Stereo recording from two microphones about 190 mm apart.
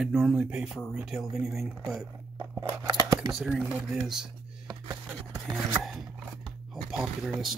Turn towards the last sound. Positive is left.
turn(degrees=0)  # may be behind; listen again after turning